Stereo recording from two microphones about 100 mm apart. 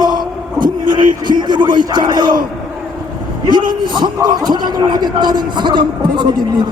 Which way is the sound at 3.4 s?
50° right (ahead or behind).